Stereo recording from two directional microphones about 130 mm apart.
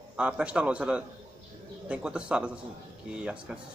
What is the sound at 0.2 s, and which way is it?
A man's voice, 10° right (ahead or behind).